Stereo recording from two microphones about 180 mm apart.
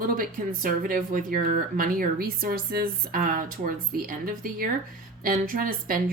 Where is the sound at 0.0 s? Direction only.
50° right (ahead or behind).